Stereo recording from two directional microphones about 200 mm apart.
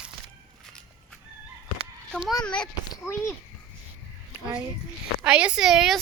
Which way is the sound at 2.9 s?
15° left (ahead or behind).